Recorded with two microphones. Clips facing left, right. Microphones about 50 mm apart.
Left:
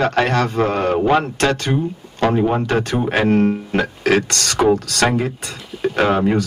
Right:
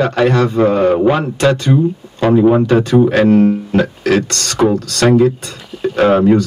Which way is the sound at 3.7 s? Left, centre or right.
Centre.